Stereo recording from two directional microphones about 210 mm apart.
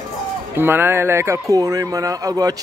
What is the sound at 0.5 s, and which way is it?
Speech, 10° right (ahead or behind).